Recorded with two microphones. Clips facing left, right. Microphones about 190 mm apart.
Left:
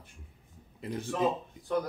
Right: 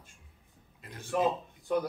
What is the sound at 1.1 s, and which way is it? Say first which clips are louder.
Speech: right 2 dB; 10° right (ahead or behind).